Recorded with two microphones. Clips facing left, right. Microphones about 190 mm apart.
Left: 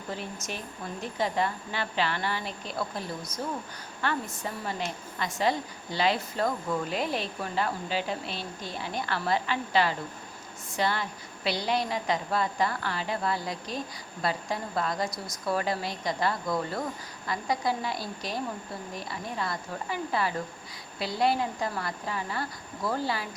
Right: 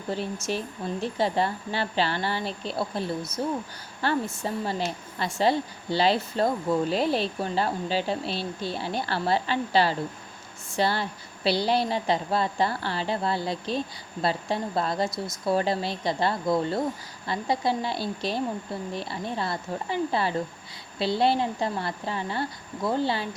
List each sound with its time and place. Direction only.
1.0 s a woman's voice: 30° right (ahead or behind)